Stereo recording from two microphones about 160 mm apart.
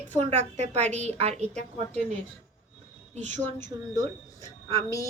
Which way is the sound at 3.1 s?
50° right (ahead or behind).